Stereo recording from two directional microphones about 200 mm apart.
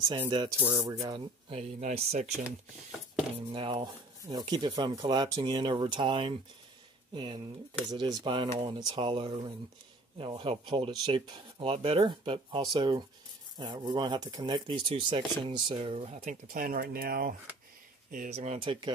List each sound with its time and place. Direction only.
0.1 s speech: 25° right (ahead or behind)
0.6 s speech: 10° right (ahead or behind)
1.0 s speech: 25° right (ahead or behind)